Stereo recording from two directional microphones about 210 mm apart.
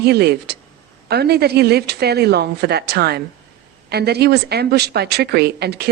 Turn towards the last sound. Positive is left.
turn(degrees=-50)  # may be behind; listen again after turning